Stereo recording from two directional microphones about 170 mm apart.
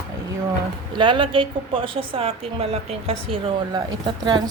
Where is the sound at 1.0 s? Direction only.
30° right (ahead or behind).